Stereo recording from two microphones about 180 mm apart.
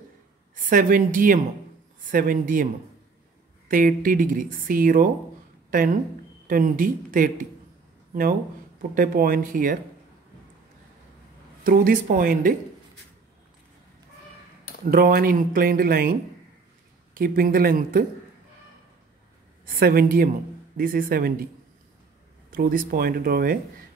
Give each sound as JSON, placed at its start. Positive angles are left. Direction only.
{"t": 0.7, "sound": "speech", "side_deg": -50}
{"t": 11.6, "sound": "speech", "side_deg": -50}
{"t": 14.9, "sound": "speech", "side_deg": -55}
{"t": 19.6, "sound": "speech", "side_deg": -55}
{"t": 22.5, "sound": "speech", "side_deg": -50}